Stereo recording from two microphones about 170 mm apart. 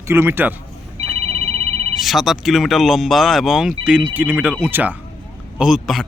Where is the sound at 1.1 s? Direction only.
35° right (ahead or behind).